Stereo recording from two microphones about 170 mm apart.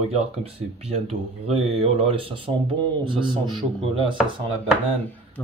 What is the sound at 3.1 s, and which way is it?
Chopping, 30° right (ahead or behind).